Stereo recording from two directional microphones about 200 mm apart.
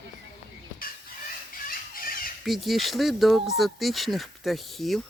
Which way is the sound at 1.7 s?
45° left (ahead or behind).